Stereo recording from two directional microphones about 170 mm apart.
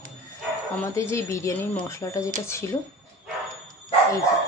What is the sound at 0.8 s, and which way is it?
Speech, 15° left (ahead or behind).